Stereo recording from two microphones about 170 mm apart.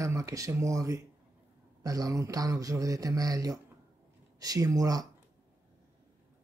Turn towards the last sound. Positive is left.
turn(degrees=-20)  # may be behind; listen again after turning